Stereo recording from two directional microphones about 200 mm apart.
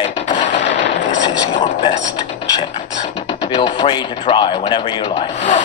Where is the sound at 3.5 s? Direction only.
25° left (ahead or behind).